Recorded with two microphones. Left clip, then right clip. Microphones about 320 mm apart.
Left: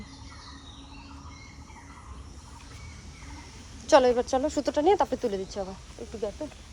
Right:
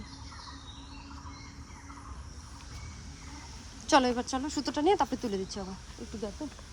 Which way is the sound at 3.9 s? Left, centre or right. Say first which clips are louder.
Left 6 dB; centre.